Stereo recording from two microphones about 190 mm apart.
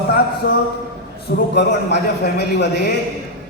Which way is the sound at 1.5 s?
65° left (ahead or behind).